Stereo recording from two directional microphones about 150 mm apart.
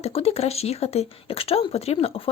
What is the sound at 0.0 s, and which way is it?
A woman's voice, 40° left (ahead or behind).